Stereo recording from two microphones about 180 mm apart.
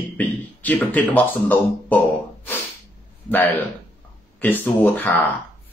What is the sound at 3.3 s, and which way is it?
Speech, 10° left (ahead or behind).